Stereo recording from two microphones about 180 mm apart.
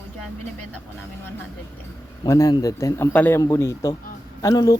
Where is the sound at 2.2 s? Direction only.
20° left (ahead or behind).